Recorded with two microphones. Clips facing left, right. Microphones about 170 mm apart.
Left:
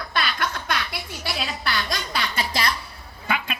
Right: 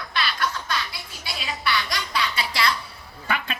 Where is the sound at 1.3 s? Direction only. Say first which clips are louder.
Right 2 dB; 50° left (ahead or behind).